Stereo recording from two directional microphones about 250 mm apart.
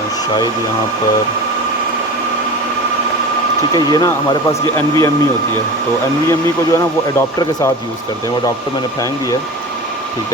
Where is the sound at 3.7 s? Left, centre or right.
Centre.